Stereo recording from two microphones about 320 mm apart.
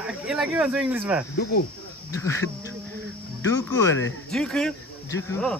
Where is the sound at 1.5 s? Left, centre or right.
Left.